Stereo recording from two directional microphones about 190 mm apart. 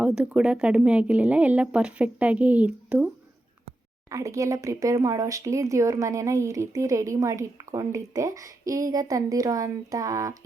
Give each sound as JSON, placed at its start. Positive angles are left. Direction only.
{"t": 0.0, "sound": "speech", "side_deg": -5}
{"t": 4.1, "sound": "speech", "side_deg": -15}